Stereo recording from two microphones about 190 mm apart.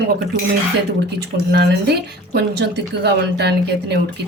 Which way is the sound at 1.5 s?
60° right (ahead or behind).